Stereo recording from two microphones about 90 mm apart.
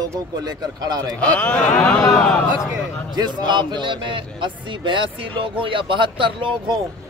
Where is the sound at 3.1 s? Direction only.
55° right (ahead or behind).